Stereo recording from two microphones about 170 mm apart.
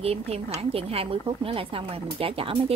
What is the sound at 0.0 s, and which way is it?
A woman's voice, 35° right (ahead or behind).